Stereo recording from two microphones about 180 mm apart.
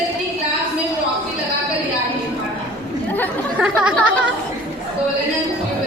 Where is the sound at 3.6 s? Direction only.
5° right (ahead or behind).